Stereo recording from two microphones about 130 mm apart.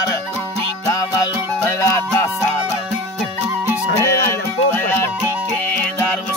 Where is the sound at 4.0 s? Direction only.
20° left (ahead or behind).